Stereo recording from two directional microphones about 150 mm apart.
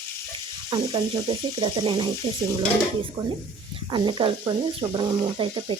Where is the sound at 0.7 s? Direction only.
30° right (ahead or behind).